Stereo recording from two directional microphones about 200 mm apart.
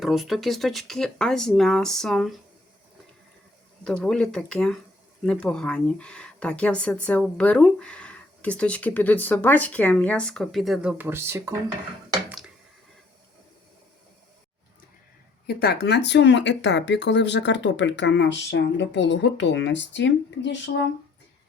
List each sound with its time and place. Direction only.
0.0 s speech: centre (ahead or behind)
3.8 s speech: 5° left (ahead or behind); by 11.5 s 15° right (ahead or behind)
15.4 s speech: 55° left (ahead or behind)